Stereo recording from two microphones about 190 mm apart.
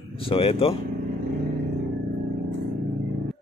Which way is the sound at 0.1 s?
30° left (ahead or behind).